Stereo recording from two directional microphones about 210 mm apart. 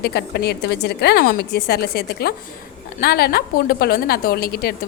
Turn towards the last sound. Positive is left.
turn(degrees=50)  # may be behind; listen again after turning